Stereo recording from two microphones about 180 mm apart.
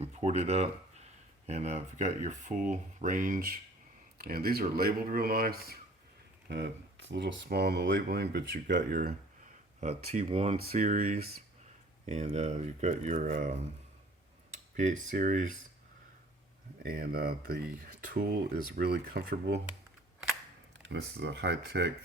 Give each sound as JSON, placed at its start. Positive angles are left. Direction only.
{"t": 0.0, "sound": "speech", "side_deg": -35}
{"t": 6.5, "sound": "speech", "side_deg": -75}
{"t": 9.8, "sound": "speech", "side_deg": -35}
{"t": 16.8, "sound": "speech", "side_deg": -55}
{"t": 20.8, "sound": "speech", "side_deg": -75}